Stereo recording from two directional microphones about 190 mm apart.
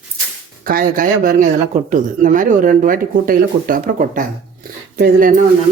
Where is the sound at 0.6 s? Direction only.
50° right (ahead or behind).